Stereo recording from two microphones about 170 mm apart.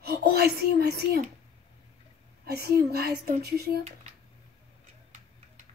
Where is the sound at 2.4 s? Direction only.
65° right (ahead or behind).